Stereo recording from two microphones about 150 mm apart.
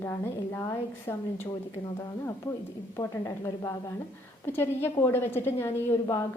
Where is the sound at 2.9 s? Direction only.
20° left (ahead or behind).